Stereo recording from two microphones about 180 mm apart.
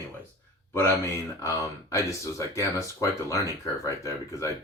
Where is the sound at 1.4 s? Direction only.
15° left (ahead or behind).